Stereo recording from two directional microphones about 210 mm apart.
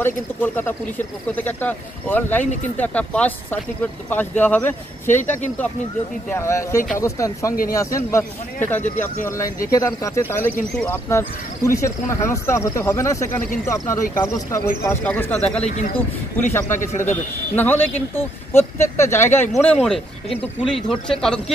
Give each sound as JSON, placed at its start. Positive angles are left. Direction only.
{"t": 0.0, "sound": "speech", "side_deg": 10}
{"t": 6.3, "sound": "speech", "side_deg": 15}
{"t": 9.1, "sound": "speech", "side_deg": 40}
{"t": 9.7, "sound": "speech", "side_deg": 15}
{"t": 15.6, "sound": "speech", "side_deg": 35}
{"t": 17.6, "sound": "speech", "side_deg": 10}